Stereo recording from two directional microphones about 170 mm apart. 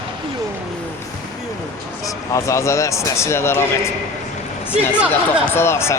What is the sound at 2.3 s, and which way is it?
Speech, 15° left (ahead or behind).